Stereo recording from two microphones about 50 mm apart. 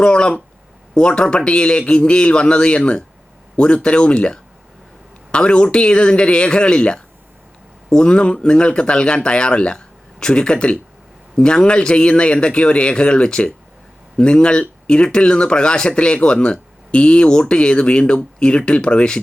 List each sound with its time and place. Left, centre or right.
0.0 s speech: centre